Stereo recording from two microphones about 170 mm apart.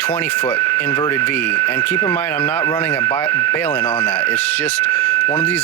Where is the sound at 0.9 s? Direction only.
20° left (ahead or behind).